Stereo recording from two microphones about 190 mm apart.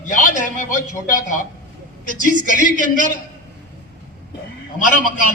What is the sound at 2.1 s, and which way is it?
Speech, 45° right (ahead or behind).